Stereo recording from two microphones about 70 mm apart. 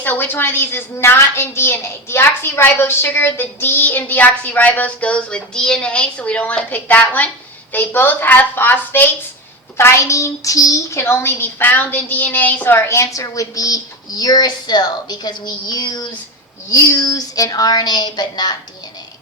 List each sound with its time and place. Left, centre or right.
0.0 s a woman's voice: left
9.7 s a woman's voice: left
16.6 s speech: left